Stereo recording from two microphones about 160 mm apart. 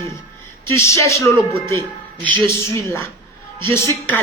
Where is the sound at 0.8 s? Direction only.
20° left (ahead or behind).